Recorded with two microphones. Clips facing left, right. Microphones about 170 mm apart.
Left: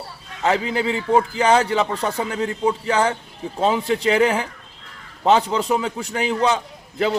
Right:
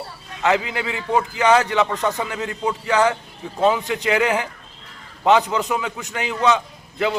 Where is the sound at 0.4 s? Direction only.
30° left (ahead or behind).